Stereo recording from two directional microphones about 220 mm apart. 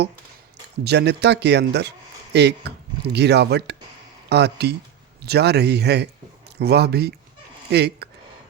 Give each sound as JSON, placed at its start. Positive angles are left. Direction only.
{"t": 0.9, "sound": "speech", "side_deg": -50}